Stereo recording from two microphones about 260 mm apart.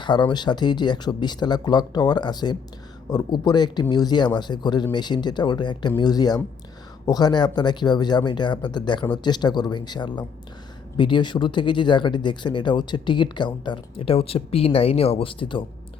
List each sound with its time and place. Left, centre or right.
0.0 s speech: centre